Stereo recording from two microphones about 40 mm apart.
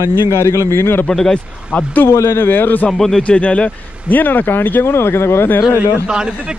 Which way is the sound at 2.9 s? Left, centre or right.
Centre.